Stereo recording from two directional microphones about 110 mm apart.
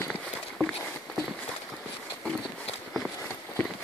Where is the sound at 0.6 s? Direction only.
5° left (ahead or behind).